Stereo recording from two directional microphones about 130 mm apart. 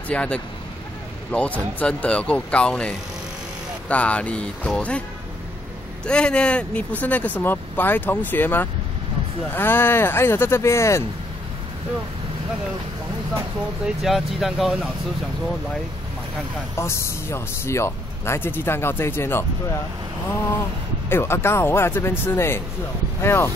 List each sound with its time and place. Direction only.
0.1 s speech: 10° left (ahead or behind)
3.9 s speech: 10° left (ahead or behind)
6.0 s speech: 5° left (ahead or behind)
13.8 s speech: centre (ahead or behind)
16.7 s speech: 20° left (ahead or behind)
21.1 s speech: 20° left (ahead or behind)